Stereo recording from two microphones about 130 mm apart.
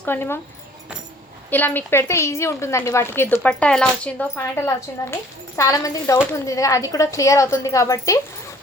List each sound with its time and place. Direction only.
0.0 s speech: 15° left (ahead or behind)
1.5 s a woman's voice: 15° left (ahead or behind)